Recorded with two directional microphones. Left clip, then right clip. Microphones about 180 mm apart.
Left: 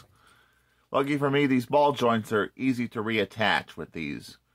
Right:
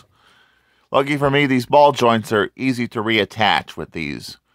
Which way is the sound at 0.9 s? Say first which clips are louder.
Right 8 dB; 55° right (ahead or behind).